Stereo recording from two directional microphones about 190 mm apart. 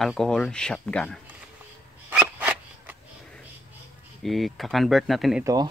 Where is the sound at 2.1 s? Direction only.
10° right (ahead or behind).